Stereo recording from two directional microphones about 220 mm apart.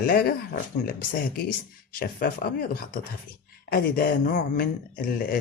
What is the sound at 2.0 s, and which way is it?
A man's voice, 40° left (ahead or behind).